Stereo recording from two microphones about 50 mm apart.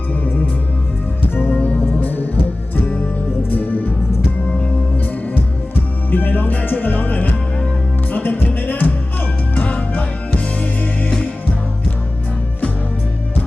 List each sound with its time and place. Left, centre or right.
1.5 s music: left
3.5 s music: left
5.2 s music: left